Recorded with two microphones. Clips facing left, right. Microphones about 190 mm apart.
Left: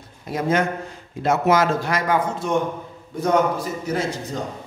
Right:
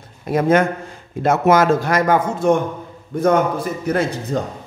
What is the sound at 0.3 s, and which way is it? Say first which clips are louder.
A man's voice: right 6 dB; 55° right (ahead or behind).